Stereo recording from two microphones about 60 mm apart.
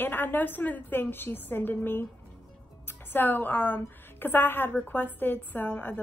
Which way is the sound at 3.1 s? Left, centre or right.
Left.